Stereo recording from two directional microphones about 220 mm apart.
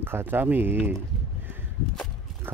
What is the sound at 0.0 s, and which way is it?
Speech, 10° right (ahead or behind).